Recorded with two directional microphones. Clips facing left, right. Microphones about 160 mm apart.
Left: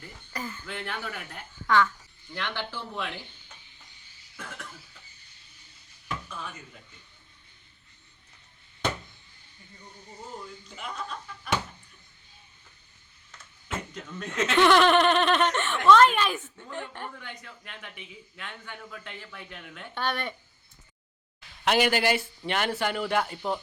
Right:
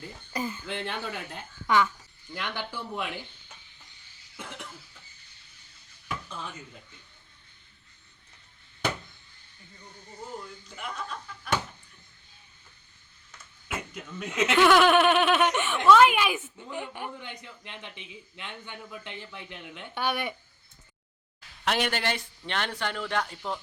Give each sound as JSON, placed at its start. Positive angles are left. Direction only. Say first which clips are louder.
{"t": 0.0, "sound": "a man's voice", "louder": "right 4 dB", "side_deg": -15}
{"t": 4.4, "sound": "cough", "louder": "right 1 dB", "side_deg": -20}
{"t": 10.4, "sound": "a sound", "louder": "even", "side_deg": 0}
{"t": 13.7, "sound": "a woman's voice", "louder": "left 1 dB", "side_deg": -5}
{"t": 19.9, "sound": "a woman's voice", "louder": "right 1 dB", "side_deg": -10}
{"t": 21.6, "sound": "a man's voice", "louder": "left 4 dB", "side_deg": 0}